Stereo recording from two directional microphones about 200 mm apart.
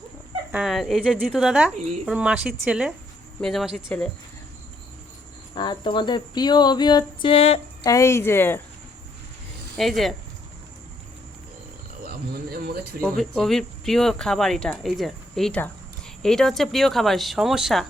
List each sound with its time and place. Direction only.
0.5 s speech: centre (ahead or behind)
5.5 s speech: 25° left (ahead or behind)
7.9 s speech: 15° left (ahead or behind)
9.7 s speech: centre (ahead or behind)
12.0 s a sound: 50° right (ahead or behind)
13.0 s speech: 5° left (ahead or behind)